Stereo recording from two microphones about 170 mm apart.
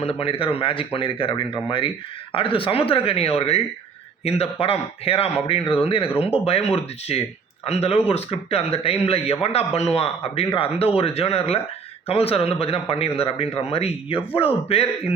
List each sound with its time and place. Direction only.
0.0 s a man's voice: 35° left (ahead or behind)